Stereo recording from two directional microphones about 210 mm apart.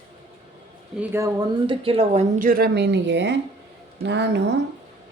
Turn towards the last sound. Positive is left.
turn(degrees=-55)  # may be behind; listen again after turning